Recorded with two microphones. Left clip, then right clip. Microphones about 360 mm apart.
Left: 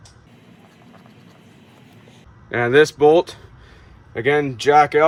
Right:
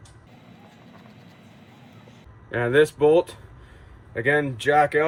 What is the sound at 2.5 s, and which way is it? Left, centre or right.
Speech, centre.